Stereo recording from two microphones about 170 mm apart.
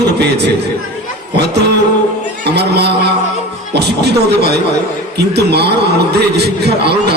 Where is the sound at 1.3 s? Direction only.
80° right.